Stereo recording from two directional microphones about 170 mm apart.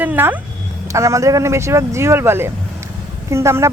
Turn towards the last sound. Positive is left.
turn(degrees=-15)  # may be behind; listen again after turning